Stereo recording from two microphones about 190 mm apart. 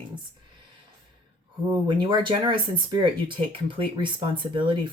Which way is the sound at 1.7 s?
25° right (ahead or behind).